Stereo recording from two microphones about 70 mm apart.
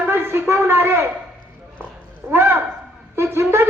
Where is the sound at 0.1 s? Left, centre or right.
Right.